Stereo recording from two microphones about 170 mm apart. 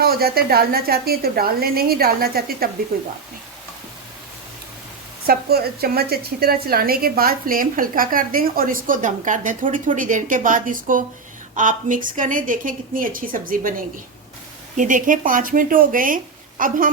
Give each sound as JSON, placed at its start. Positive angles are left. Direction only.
{"t": 0.0, "sound": "a woman's voice", "side_deg": -65}
{"t": 5.2, "sound": "a woman's voice", "side_deg": -65}